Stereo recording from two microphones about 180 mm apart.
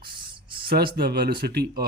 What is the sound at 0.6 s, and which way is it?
Speech, 55° right (ahead or behind).